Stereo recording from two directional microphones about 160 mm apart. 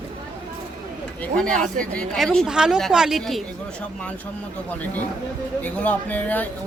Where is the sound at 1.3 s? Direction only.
5° left (ahead or behind).